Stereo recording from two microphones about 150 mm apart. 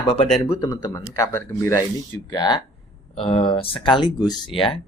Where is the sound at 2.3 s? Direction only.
30° left (ahead or behind).